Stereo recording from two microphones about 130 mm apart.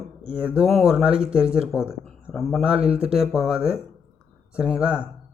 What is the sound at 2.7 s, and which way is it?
Speech, 50° right (ahead or behind).